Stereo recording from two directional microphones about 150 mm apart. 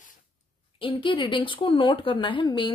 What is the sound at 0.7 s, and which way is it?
A woman's voice, 35° left (ahead or behind).